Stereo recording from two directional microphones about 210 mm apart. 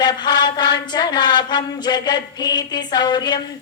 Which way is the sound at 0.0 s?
20° left (ahead or behind).